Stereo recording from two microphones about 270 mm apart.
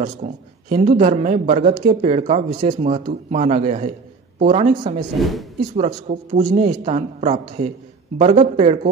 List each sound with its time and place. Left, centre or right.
0.0 s a man's voice: right
5.2 s speech: centre
5.8 s a man's voice: right